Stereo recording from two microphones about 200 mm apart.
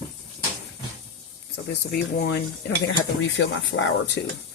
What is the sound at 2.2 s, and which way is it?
Speech, 55° left (ahead or behind).